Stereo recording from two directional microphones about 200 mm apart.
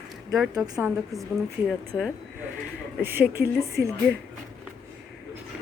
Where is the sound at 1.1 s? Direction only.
Centre (ahead or behind).